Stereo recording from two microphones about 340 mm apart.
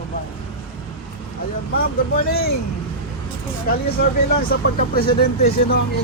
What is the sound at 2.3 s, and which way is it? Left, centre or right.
Speech, left.